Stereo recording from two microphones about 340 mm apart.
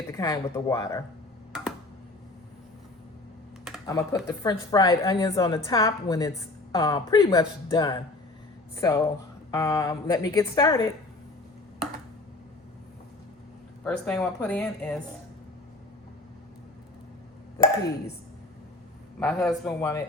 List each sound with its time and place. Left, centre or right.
0.1 s a woman's voice: centre
3.8 s a woman's voice: centre
13.8 s speech: centre
19.2 s speech: centre